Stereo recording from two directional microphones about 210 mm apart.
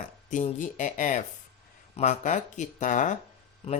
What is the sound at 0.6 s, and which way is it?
Speech, 40° left (ahead or behind).